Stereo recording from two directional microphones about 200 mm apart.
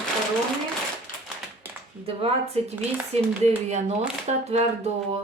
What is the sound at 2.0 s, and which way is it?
A woman's voice, 30° right (ahead or behind).